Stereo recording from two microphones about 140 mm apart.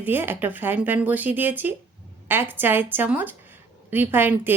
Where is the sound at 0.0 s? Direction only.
15° right (ahead or behind).